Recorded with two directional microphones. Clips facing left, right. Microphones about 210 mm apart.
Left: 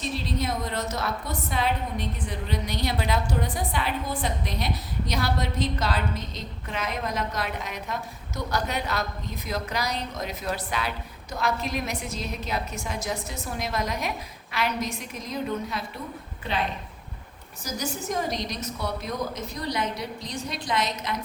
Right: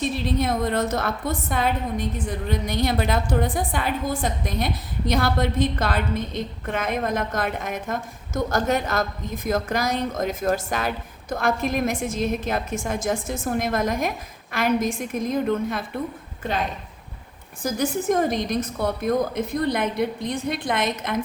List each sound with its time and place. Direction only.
0.3 s a woman's voice: 55° right (ahead or behind)